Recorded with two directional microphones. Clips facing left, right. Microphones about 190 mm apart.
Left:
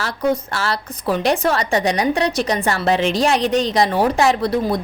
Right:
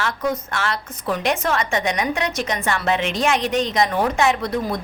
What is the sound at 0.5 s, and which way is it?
A woman's voice, 35° left (ahead or behind).